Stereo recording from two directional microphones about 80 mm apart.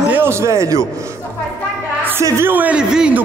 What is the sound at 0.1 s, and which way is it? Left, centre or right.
Speech, right.